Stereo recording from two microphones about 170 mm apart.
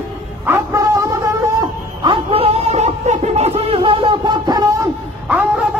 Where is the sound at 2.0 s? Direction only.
30° right (ahead or behind).